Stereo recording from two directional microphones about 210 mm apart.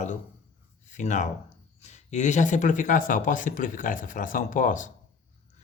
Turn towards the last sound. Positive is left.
turn(degrees=40)  # may be behind; listen again after turning